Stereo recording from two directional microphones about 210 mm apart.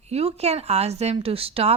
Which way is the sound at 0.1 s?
30° right (ahead or behind).